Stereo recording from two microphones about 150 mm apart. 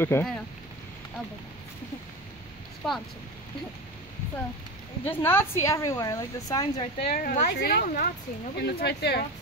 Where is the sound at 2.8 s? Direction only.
5° left (ahead or behind).